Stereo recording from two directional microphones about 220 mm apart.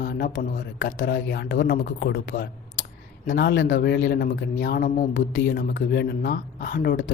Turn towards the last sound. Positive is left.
turn(degrees=40)  # may be behind; listen again after turning